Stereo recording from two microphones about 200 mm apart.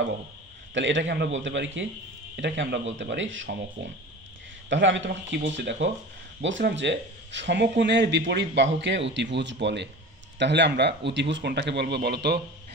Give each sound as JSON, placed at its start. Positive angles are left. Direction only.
{"t": 0.7, "sound": "speech", "side_deg": -65}